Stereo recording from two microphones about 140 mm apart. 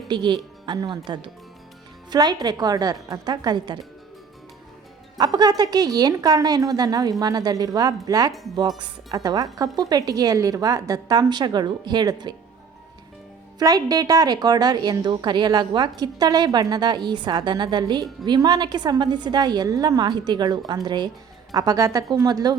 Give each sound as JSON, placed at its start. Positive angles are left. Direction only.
{"t": 0.1, "sound": "a woman's voice", "side_deg": -35}
{"t": 5.1, "sound": "a woman's voice", "side_deg": -30}
{"t": 13.6, "sound": "a woman's voice", "side_deg": -25}